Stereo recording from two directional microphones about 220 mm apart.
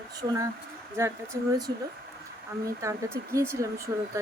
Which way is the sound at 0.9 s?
15° right (ahead or behind).